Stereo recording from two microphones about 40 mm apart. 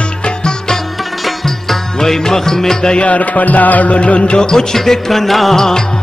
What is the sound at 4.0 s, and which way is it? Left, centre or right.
Music, left.